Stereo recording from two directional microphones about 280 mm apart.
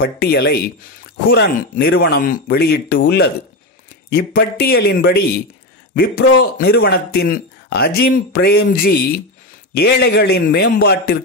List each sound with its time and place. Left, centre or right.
0.0 s speech: left
6.6 s speech: left